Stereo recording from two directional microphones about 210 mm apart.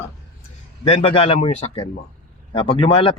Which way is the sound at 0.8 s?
25° left (ahead or behind).